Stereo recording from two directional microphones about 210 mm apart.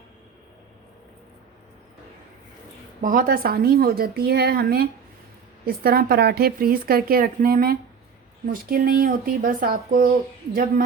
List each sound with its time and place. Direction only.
3.0 s a woman's voice: 40° right (ahead or behind)